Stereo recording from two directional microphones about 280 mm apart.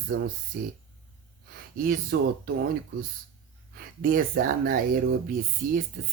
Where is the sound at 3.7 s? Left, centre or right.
Right.